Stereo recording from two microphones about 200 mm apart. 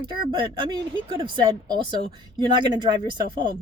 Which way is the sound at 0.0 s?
25° right (ahead or behind).